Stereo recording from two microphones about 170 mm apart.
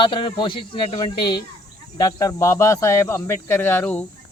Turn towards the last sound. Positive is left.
turn(degrees=10)  # may be behind; listen again after turning